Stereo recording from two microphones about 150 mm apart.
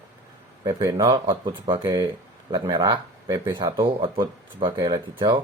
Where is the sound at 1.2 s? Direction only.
35° right (ahead or behind).